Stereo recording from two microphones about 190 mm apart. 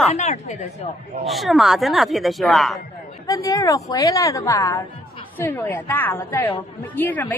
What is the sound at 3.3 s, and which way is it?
A woman's voice, 20° left (ahead or behind).